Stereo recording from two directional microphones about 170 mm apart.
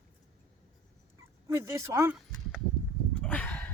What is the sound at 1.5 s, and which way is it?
Speech, 15° right (ahead or behind).